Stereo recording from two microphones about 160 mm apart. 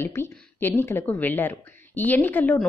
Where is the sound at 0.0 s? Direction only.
15° left (ahead or behind).